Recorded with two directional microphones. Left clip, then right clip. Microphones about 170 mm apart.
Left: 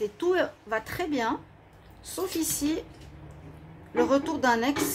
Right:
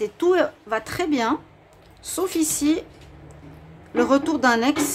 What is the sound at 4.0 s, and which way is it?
Speech, 25° right (ahead or behind).